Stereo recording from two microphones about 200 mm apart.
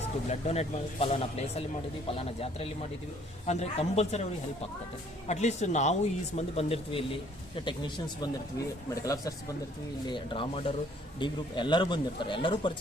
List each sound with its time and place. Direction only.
0.3 s speech: 30° left (ahead or behind)